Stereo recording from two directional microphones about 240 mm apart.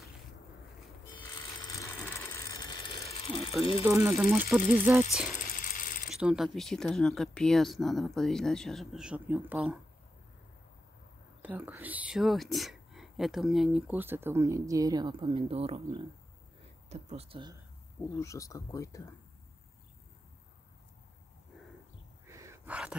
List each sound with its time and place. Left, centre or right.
1.8 s ratchet: centre
3.8 s speech: centre
5.4 s ratchet: left
6.0 s speech: centre
11.4 s speech: centre
18.2 s speech: centre
22.3 s a sound: centre